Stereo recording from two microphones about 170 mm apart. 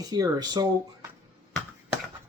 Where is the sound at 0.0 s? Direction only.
20° right (ahead or behind).